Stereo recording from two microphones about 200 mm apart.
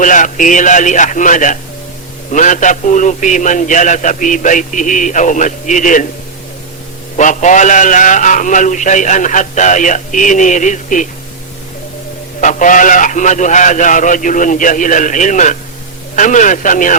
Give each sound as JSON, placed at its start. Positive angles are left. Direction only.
{"t": 0.0, "sound": "a man's voice", "side_deg": 40}
{"t": 7.2, "sound": "a man's voice", "side_deg": 40}
{"t": 12.4, "sound": "a man's voice", "side_deg": 40}